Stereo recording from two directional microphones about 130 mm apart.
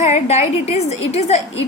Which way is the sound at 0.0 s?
55° left (ahead or behind).